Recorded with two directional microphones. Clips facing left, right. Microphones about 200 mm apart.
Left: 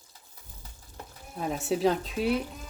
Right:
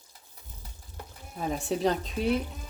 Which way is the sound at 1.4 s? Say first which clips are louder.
Left 1 dB; centre (ahead or behind).